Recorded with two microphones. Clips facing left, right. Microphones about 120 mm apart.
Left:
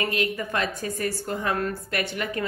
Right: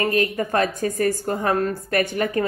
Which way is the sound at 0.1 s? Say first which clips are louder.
Right 6 dB; 45° right (ahead or behind).